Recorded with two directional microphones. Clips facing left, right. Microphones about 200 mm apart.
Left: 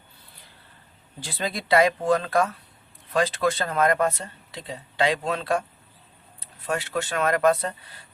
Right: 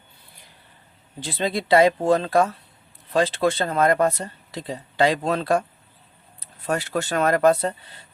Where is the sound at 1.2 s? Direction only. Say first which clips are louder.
Right 5 dB; 25° right (ahead or behind).